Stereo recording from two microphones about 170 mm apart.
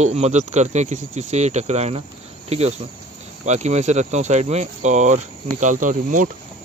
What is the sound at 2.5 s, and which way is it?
Cricket, 35° right (ahead or behind).